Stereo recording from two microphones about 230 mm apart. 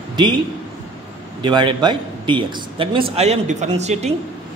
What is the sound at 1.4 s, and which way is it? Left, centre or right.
A man's voice, centre.